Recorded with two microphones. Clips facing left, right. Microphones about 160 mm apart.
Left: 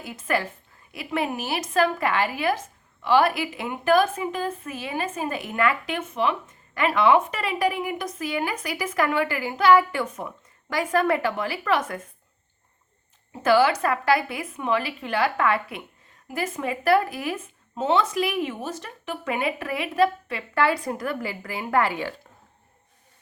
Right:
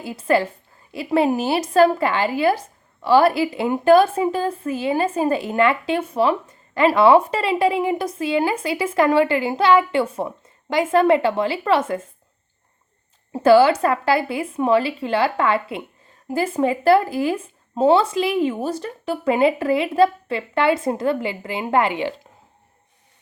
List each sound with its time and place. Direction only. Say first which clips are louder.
0.0 s a woman's voice: right 7 dB; 30° right (ahead or behind)
13.3 s a woman's voice: right 6 dB; 30° right (ahead or behind)